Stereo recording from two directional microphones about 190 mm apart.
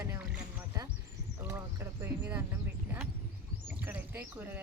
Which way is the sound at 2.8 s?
10° right (ahead or behind).